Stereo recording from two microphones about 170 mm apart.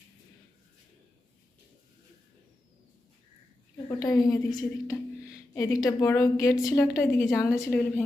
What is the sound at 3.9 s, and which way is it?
A woman's voice, 20° left (ahead or behind).